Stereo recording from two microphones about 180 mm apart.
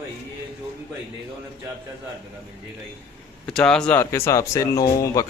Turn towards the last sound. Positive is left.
turn(degrees=20)  # may be behind; listen again after turning